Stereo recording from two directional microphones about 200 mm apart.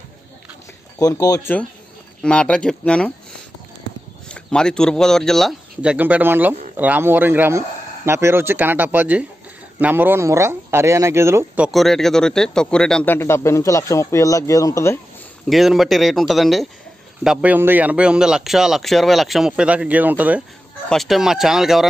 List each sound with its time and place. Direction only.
0.9 s speech: 15° left (ahead or behind)
2.2 s speech: 5° left (ahead or behind)
3.9 s horse: 60° right (ahead or behind)
4.3 s speech: 5° left (ahead or behind)
15.4 s speech: centre (ahead or behind)